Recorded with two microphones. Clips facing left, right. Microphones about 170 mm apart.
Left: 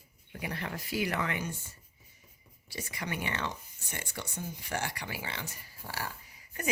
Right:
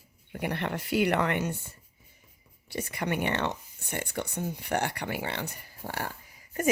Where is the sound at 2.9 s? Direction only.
60° right (ahead or behind).